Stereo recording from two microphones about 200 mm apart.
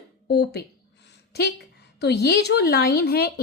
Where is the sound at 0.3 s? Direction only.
55° left (ahead or behind).